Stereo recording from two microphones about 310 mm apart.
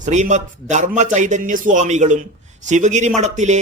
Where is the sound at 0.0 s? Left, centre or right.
Right.